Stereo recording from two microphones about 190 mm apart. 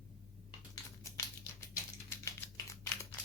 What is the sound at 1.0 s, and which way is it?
Crumpling, 15° left (ahead or behind).